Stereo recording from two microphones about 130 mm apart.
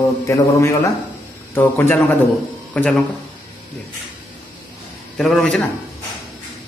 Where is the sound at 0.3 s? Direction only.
25° left (ahead or behind); by 3.0 s 5° left (ahead or behind).